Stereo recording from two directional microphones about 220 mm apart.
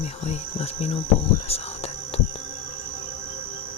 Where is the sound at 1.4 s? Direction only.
25° left (ahead or behind).